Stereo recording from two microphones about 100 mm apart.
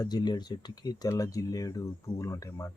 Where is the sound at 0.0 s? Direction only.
45° left (ahead or behind).